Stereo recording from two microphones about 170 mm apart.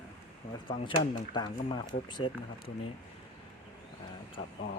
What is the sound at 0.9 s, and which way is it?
Speech, 25° left (ahead or behind).